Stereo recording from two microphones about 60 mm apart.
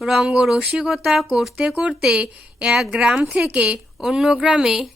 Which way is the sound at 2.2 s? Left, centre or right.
Centre.